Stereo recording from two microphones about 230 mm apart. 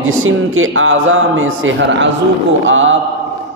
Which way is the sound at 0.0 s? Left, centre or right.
Right.